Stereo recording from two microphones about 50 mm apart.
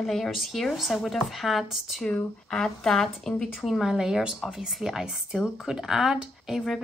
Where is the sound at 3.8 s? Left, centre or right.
Centre.